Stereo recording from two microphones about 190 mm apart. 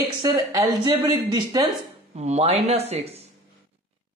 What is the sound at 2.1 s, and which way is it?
Speech, 35° right (ahead or behind).